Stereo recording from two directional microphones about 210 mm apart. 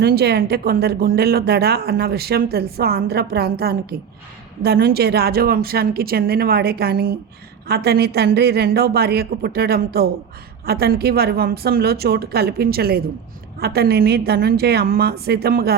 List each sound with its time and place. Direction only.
0.0 s speech: 50° right (ahead or behind)